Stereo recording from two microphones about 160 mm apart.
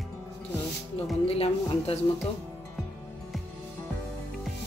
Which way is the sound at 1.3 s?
40° left (ahead or behind).